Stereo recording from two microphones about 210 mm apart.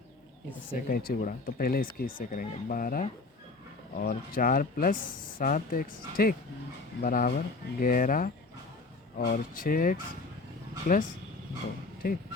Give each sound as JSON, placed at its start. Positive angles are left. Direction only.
{"t": 0.9, "sound": "speech", "side_deg": 45}
{"t": 12.0, "sound": "speech", "side_deg": 45}